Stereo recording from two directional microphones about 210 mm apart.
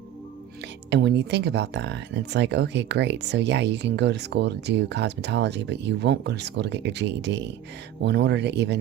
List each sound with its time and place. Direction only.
0.9 s speech: 55° right (ahead or behind)